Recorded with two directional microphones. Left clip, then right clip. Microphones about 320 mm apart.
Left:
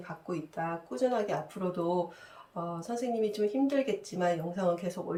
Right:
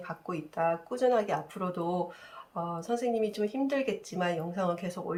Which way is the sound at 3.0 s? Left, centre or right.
Centre.